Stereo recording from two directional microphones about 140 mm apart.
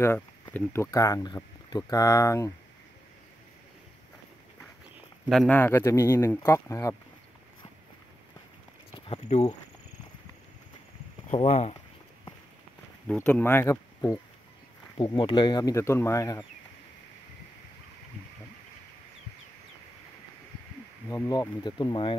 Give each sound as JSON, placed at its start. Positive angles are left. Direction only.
{"t": 0.0, "sound": "speech", "side_deg": 15}
{"t": 0.9, "sound": "speech", "side_deg": 25}
{"t": 5.5, "sound": "speech", "side_deg": 15}
{"t": 8.9, "sound": "a sound", "side_deg": 40}
{"t": 11.3, "sound": "speech", "side_deg": 50}
{"t": 13.0, "sound": "speech", "side_deg": 10}
{"t": 15.0, "sound": "speech", "side_deg": 35}
{"t": 21.1, "sound": "speech", "side_deg": 30}